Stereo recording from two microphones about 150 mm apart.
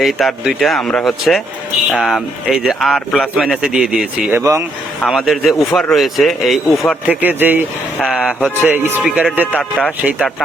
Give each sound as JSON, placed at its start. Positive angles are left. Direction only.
{"t": 0.0, "sound": "a man's voice", "side_deg": 0}
{"t": 4.3, "sound": "a man's voice", "side_deg": -15}
{"t": 5.0, "sound": "a man's voice", "side_deg": 0}
{"t": 7.1, "sound": "a man's voice", "side_deg": -10}
{"t": 8.4, "sound": "speech", "side_deg": 10}
{"t": 9.0, "sound": "a man's voice", "side_deg": -5}
{"t": 9.5, "sound": "speech", "side_deg": 5}